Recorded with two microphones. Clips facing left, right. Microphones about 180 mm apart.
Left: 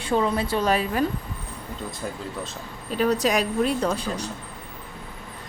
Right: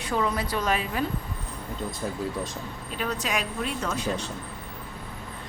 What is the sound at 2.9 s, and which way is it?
A woman's voice, 35° left (ahead or behind).